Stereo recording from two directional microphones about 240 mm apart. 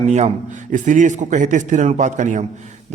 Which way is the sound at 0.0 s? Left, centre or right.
Right.